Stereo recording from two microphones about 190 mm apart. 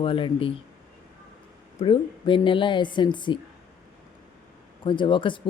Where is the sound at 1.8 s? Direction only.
25° left (ahead or behind).